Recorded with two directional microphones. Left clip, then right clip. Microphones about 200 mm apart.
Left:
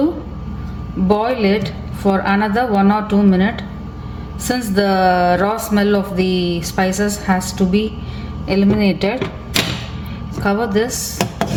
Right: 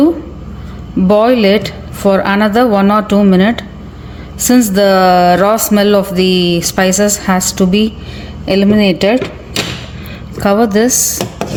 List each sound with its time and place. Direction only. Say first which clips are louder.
1.0 s speech: right 7 dB; 55° right (ahead or behind)
10.4 s speech: right 7 dB; 55° right (ahead or behind)